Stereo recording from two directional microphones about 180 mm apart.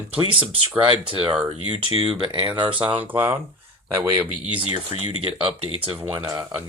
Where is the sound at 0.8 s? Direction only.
30° right (ahead or behind).